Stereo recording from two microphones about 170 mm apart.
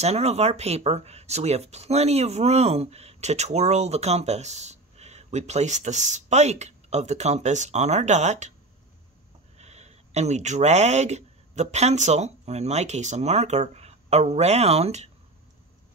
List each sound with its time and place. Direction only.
0.0 s speech: 40° right (ahead or behind)
9.6 s speech: 40° right (ahead or behind)